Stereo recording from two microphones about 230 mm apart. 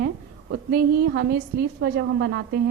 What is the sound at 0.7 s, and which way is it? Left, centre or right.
A woman's voice, right.